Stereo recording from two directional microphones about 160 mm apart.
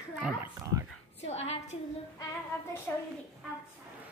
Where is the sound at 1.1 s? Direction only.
40° left (ahead or behind).